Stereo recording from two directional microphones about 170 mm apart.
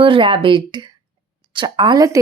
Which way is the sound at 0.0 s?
30° right (ahead or behind).